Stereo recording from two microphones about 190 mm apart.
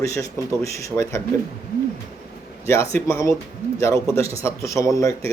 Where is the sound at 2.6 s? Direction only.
15° left (ahead or behind).